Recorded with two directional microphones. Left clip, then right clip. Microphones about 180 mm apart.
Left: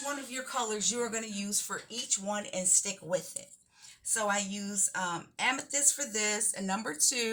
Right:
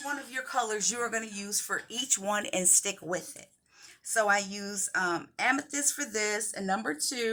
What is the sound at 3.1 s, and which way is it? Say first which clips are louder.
Speech: left 1 dB; 40° right (ahead or behind).